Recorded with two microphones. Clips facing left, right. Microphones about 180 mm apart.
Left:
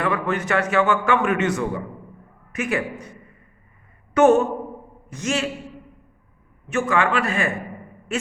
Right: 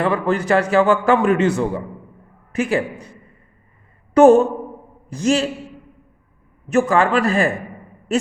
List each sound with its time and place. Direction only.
0.0 s a man's voice: 30° right (ahead or behind)
3.0 s a sound: 30° right (ahead or behind)
4.1 s a man's voice: 35° right (ahead or behind)
6.7 s a man's voice: 35° right (ahead or behind)